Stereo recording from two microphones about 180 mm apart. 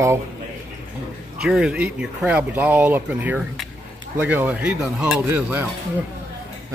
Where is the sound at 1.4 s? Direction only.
5° right (ahead or behind).